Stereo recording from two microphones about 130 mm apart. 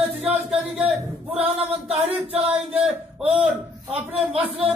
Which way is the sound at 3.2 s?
10° right (ahead or behind).